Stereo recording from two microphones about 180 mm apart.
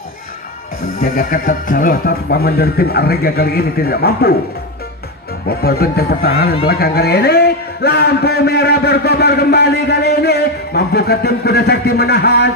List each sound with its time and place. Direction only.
1.0 s speech: 50° left (ahead or behind)
5.5 s speech: 60° left (ahead or behind)